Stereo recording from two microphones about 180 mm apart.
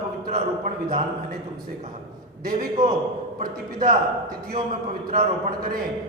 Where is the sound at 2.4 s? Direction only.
55° right (ahead or behind).